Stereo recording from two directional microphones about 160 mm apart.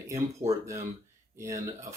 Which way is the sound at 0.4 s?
15° right (ahead or behind).